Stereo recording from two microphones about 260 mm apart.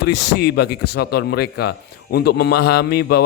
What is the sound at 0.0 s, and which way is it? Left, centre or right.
A man's voice, left.